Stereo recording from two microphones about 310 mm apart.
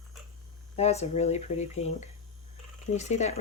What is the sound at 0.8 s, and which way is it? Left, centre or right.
Speech, left.